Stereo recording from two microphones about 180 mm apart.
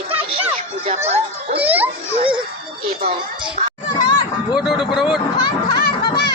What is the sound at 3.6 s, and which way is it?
Children playing, 50° right (ahead or behind).